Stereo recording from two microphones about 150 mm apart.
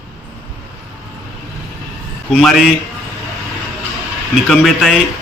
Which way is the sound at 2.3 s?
5° left (ahead or behind).